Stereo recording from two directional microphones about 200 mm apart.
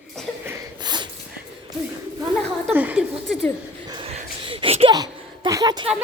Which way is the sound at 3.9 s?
25° right (ahead or behind).